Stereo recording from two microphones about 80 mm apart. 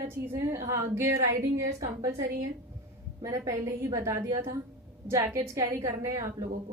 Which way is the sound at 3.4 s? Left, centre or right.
Right.